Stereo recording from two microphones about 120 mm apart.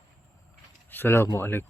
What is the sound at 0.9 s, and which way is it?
Speech, 20° left (ahead or behind).